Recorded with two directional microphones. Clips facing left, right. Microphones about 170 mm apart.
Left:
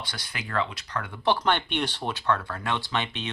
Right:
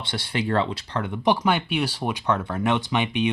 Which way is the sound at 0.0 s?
25° right (ahead or behind).